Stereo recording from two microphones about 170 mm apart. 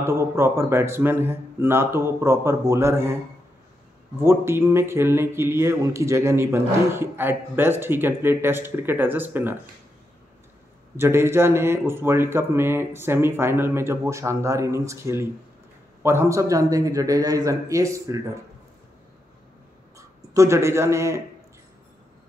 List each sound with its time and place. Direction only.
0.0 s speech: 15° right (ahead or behind)
4.2 s speech: 15° right (ahead or behind)
11.0 s a man's voice: 15° right (ahead or behind)
20.0 s speech: 20° right (ahead or behind)